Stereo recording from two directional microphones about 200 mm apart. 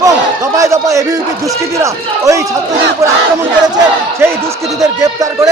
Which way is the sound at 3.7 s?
10° right (ahead or behind).